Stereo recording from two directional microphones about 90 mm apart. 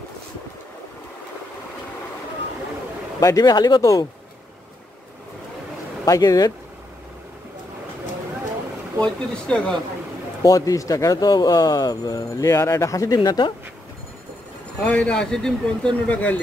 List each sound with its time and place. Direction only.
3.2 s speech: 40° left (ahead or behind)
6.0 s speech: 40° left (ahead or behind)
9.0 s speech: 10° left (ahead or behind)
10.4 s speech: 40° left (ahead or behind)
12.4 s speech: 30° left (ahead or behind); by 13.5 s 45° left (ahead or behind)
14.8 s speech: 10° left (ahead or behind)